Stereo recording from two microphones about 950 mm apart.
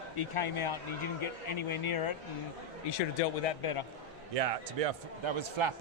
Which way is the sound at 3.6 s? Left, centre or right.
Left.